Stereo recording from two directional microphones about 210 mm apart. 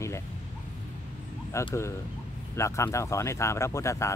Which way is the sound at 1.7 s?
15° left (ahead or behind).